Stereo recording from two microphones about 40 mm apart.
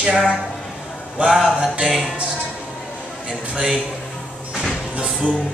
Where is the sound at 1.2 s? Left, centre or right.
Right.